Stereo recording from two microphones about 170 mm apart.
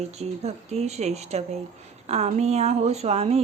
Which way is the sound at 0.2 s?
40° right (ahead or behind).